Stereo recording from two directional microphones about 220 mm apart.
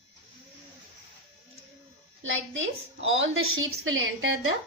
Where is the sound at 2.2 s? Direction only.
60° right (ahead or behind).